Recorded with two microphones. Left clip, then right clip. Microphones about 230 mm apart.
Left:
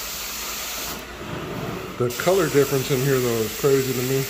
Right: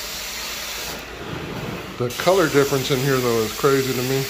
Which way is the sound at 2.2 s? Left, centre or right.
Centre.